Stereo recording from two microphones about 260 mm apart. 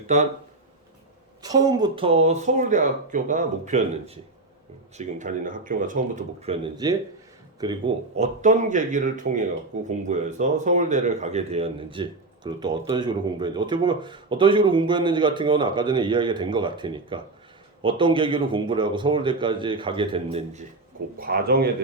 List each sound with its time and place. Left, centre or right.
1.4 s a man's voice: centre
21.2 s speech: right